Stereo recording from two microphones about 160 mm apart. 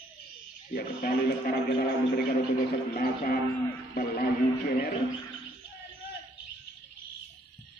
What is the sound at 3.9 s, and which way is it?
Music, 70° left (ahead or behind).